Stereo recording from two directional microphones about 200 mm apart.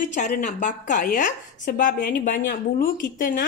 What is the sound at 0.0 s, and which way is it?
A woman's voice, 40° left (ahead or behind).